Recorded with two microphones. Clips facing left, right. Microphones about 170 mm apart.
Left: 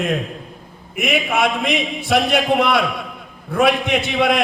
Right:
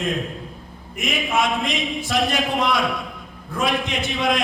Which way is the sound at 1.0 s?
60° left (ahead or behind).